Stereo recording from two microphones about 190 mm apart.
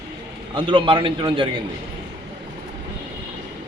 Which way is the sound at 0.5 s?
25° right (ahead or behind).